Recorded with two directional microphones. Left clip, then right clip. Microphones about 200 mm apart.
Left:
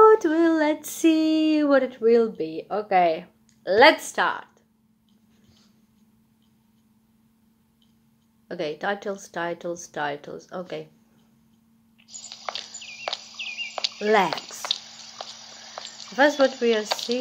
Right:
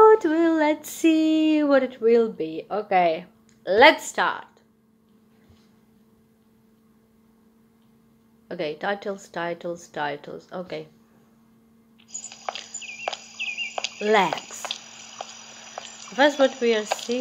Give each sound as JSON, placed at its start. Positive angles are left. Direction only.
{"t": 0.0, "sound": "a sound", "side_deg": 0}
{"t": 4.0, "sound": "speech", "side_deg": 0}
{"t": 8.5, "sound": "speech", "side_deg": 0}
{"t": 13.1, "sound": "cricket", "side_deg": 35}
{"t": 13.9, "sound": "speech", "side_deg": 0}
{"t": 14.7, "sound": "a sound", "side_deg": 35}
{"t": 16.2, "sound": "speech", "side_deg": 0}